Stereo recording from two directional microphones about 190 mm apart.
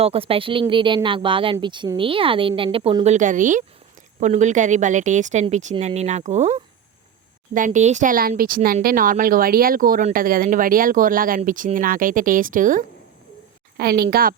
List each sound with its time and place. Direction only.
0.0 s a woman's voice: 30° right (ahead or behind)
13.7 s speech: 55° right (ahead or behind)